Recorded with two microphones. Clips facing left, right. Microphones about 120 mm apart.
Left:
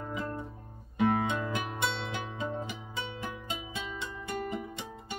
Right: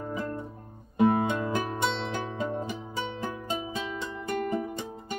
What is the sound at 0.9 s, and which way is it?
Music, 35° right (ahead or behind).